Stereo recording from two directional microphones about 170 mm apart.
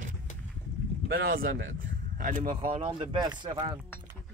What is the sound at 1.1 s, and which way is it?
Speech, 65° right (ahead or behind).